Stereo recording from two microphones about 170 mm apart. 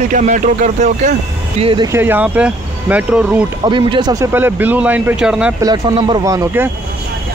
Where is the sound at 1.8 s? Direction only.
15° right (ahead or behind).